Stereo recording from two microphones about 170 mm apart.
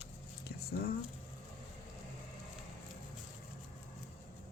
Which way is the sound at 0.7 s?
60° left (ahead or behind).